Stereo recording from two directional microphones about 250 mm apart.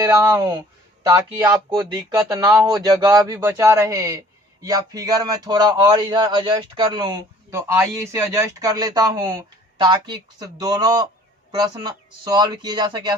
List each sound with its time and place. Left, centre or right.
0.0 s speech: centre